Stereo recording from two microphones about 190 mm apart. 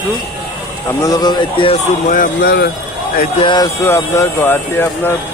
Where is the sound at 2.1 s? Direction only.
50° left (ahead or behind).